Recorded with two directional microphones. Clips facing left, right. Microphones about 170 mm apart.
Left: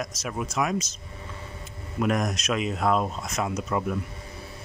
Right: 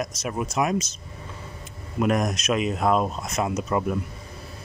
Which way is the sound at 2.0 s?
25° right (ahead or behind).